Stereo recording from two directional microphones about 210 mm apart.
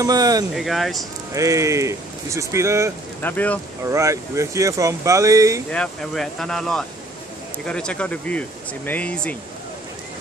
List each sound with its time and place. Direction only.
0.0 s speech: 20° right (ahead or behind)
0.6 s speech: centre (ahead or behind)
1.3 s speech: 15° right (ahead or behind)
3.2 s speech: 10° left (ahead or behind)
3.8 s speech: 15° right (ahead or behind)
5.7 s speech: 5° left (ahead or behind)